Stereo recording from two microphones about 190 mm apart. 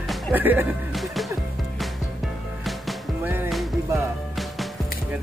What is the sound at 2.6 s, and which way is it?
Music, centre (ahead or behind).